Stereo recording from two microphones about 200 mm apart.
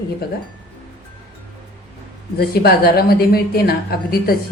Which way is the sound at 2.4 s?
50° left (ahead or behind).